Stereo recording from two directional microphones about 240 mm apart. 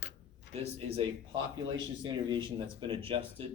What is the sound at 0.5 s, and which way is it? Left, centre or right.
A man's voice, right.